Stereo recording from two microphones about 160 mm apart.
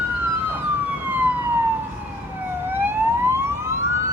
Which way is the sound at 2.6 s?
15° right (ahead or behind).